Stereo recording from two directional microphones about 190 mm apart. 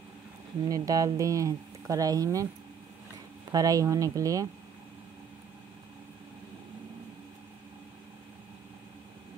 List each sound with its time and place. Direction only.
0.7 s speech: 20° right (ahead or behind)
3.5 s speech: 20° right (ahead or behind)